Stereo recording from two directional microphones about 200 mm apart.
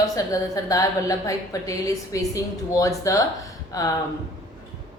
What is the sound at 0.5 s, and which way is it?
A woman's voice, 15° left (ahead or behind).